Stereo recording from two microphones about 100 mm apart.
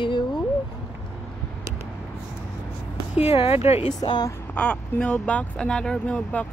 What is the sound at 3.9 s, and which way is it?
Speech, 40° left (ahead or behind).